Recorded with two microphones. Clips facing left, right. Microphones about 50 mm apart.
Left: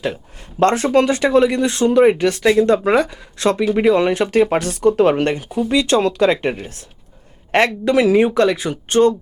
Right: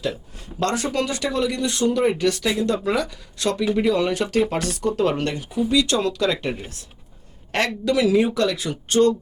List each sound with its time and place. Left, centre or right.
0.6 s speech: left